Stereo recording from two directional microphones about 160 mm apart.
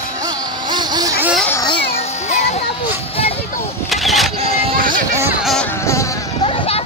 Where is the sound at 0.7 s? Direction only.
25° right (ahead or behind).